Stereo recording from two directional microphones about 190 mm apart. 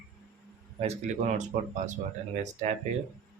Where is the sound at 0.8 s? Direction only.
35° right (ahead or behind).